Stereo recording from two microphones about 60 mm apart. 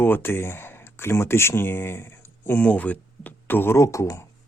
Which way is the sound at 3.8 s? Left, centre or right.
Left.